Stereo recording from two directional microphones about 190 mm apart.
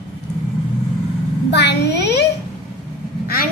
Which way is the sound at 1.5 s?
65° left (ahead or behind).